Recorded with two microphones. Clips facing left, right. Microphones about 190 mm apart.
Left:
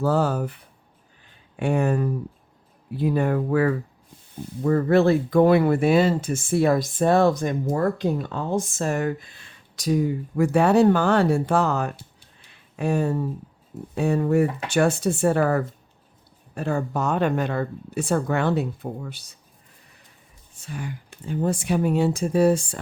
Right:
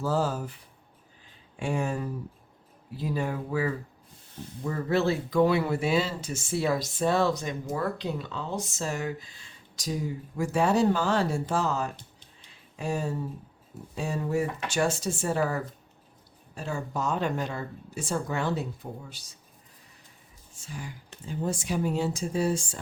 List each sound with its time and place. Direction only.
0.0 s speech: 60° left (ahead or behind)
12.4 s a sound: 60° left (ahead or behind)
13.9 s speech: 60° left (ahead or behind)
20.6 s speech: 60° left (ahead or behind)